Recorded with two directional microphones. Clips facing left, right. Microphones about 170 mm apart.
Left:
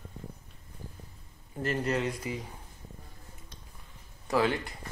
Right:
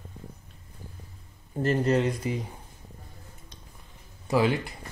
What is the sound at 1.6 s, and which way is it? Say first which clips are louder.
Speech: right 6 dB; 30° right (ahead or behind).